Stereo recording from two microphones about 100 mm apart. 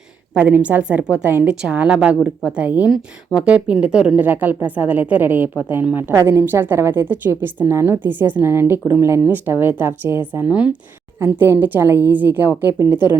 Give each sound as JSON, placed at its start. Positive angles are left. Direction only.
{"t": 0.3, "sound": "a woman's voice", "side_deg": -15}
{"t": 11.2, "sound": "a woman's voice", "side_deg": -25}